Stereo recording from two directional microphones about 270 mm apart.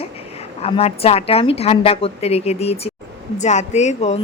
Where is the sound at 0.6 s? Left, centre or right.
Left.